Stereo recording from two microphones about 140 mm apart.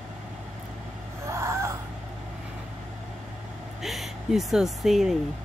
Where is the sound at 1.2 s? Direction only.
20° right (ahead or behind).